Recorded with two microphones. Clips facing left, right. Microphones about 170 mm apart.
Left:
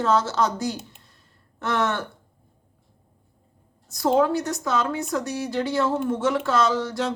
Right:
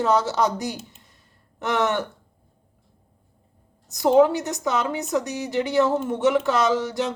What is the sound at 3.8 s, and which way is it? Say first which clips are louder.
Speech: right 4 dB; 20° right (ahead or behind).